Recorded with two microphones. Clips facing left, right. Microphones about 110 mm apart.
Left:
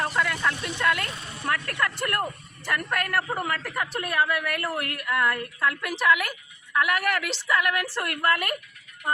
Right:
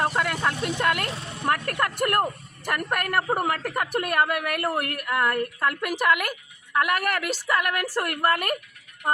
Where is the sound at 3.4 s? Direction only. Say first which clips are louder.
Right 3 dB; 45° right (ahead or behind).